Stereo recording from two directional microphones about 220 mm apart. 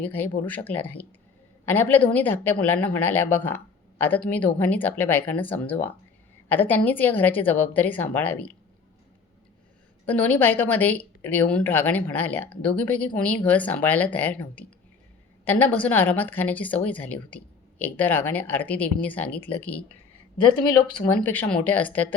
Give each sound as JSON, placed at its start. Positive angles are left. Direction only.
{"t": 0.0, "sound": "a woman's voice", "side_deg": 10}
{"t": 10.1, "sound": "a woman's voice", "side_deg": 5}
{"t": 20.4, "sound": "speech", "side_deg": 20}
{"t": 21.1, "sound": "a woman's voice", "side_deg": 10}